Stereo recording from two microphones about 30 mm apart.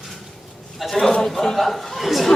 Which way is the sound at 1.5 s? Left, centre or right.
Centre.